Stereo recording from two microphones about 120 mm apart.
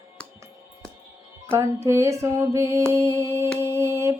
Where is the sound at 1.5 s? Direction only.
20° right (ahead or behind).